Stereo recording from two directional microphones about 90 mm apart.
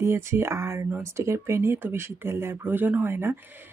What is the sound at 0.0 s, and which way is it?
Speech, 30° right (ahead or behind).